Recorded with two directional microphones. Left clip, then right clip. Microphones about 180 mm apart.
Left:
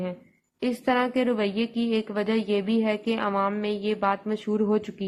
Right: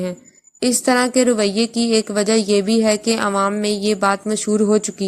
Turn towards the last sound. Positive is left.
turn(degrees=-35)  # may be behind; listen again after turning